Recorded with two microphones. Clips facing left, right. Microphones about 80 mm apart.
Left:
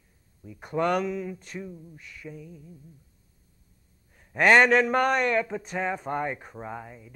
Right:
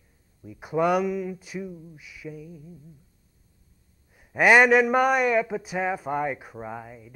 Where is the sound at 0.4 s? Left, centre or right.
Centre.